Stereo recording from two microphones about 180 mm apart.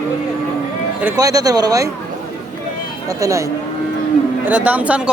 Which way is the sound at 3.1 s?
20° right (ahead or behind).